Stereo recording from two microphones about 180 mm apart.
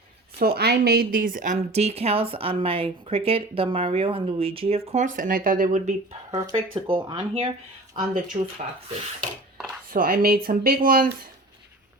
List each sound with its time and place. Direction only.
0.3 s speech: 60° right (ahead or behind)
6.3 s speech: 20° right (ahead or behind)
6.7 s speech: 30° right (ahead or behind)
9.9 s speech: 50° right (ahead or behind)